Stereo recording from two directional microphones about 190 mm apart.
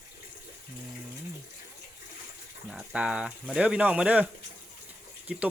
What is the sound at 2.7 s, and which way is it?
Speech, 5° right (ahead or behind).